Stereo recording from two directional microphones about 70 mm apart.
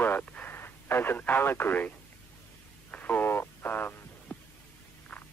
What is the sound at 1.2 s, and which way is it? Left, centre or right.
Speech, left.